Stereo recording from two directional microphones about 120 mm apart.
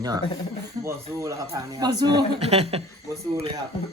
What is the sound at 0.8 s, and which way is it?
Speech, 25° right (ahead or behind).